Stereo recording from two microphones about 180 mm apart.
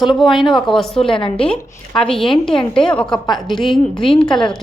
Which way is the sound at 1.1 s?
30° left (ahead or behind).